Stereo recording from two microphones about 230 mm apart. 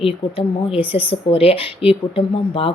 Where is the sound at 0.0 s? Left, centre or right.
Left.